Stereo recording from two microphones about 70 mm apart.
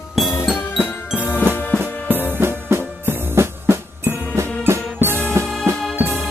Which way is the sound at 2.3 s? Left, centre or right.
Right.